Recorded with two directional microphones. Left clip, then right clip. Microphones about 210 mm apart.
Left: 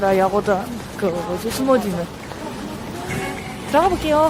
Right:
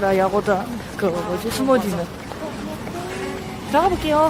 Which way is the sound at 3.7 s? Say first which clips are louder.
Left 1 dB; 10° left (ahead or behind).